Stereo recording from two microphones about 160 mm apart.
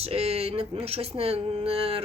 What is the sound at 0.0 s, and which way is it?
A woman's voice, 40° right (ahead or behind).